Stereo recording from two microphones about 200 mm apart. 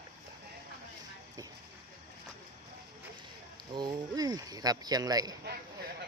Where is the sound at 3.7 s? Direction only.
20° right (ahead or behind).